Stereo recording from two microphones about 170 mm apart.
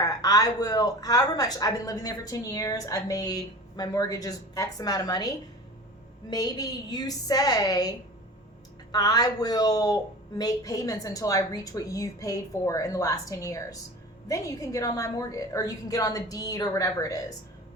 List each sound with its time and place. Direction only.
0.0 s a woman's voice: 20° left (ahead or behind)
6.3 s a woman's voice: 20° left (ahead or behind)